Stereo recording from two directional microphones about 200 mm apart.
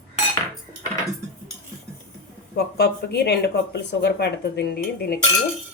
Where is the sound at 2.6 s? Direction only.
55° left (ahead or behind).